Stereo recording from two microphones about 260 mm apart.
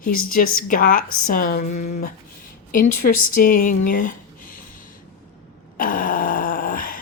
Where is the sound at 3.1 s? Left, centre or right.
Left.